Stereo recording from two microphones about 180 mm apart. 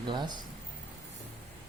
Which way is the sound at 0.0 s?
25° right (ahead or behind).